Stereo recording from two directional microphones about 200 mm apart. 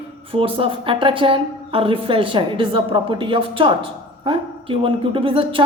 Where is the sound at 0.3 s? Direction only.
25° right (ahead or behind).